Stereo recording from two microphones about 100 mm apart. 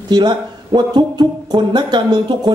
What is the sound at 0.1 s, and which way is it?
A man's voice, 50° right (ahead or behind).